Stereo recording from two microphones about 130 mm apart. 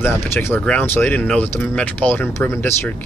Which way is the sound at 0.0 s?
15° left (ahead or behind).